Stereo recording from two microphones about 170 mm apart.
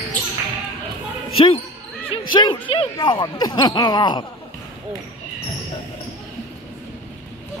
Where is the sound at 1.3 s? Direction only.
30° left (ahead or behind).